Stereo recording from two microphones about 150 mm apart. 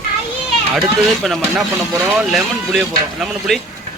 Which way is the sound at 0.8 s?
Centre (ahead or behind).